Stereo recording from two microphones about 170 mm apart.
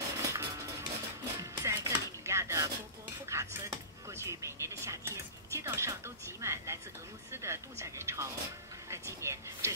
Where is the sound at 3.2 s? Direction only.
15° right (ahead or behind).